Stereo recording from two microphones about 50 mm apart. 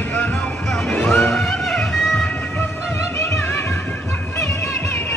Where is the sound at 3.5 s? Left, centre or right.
Left.